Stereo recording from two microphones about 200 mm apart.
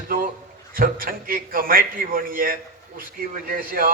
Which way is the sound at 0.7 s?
45° right (ahead or behind).